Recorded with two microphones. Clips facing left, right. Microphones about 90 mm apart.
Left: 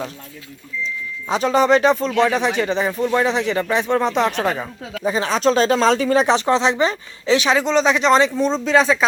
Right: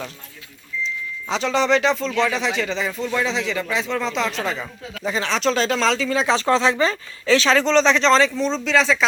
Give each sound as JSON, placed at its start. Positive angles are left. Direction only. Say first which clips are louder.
{"t": 1.3, "sound": "speech", "louder": "left 4 dB", "side_deg": 45}
{"t": 2.9, "sound": "speech", "louder": "left 5 dB", "side_deg": 15}
{"t": 3.6, "sound": "speech", "louder": "left 5 dB", "side_deg": 50}
{"t": 4.6, "sound": "speech", "louder": "left 4 dB", "side_deg": 20}
{"t": 5.2, "sound": "speech", "louder": "left 4 dB", "side_deg": 40}
{"t": 6.2, "sound": "speech", "louder": "left 2 dB", "side_deg": 20}
{"t": 8.6, "sound": "speech", "louder": "left 3 dB", "side_deg": 40}